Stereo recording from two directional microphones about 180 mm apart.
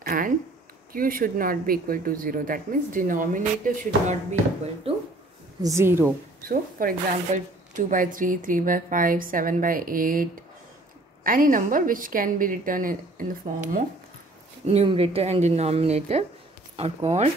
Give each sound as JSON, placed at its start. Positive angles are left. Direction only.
{"t": 0.0, "sound": "a sound", "side_deg": -50}
{"t": 0.9, "sound": "speech", "side_deg": -50}
{"t": 4.9, "sound": "a sound", "side_deg": -30}
{"t": 5.6, "sound": "speech", "side_deg": -15}
{"t": 6.5, "sound": "speech", "side_deg": -50}
{"t": 11.2, "sound": "speech", "side_deg": -50}
{"t": 14.7, "sound": "speech", "side_deg": -35}